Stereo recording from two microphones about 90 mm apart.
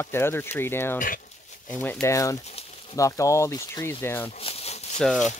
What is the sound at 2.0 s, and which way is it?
Speech, 35° left (ahead or behind).